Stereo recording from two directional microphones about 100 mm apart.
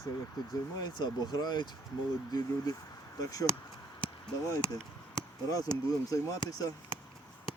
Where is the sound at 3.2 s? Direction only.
35° left (ahead or behind).